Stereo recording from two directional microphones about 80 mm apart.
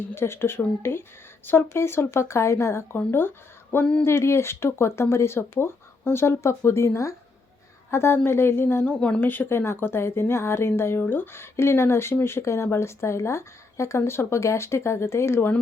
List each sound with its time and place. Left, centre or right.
0.1 s a woman's voice: left; by 9.2 s centre
9.2 s speech: left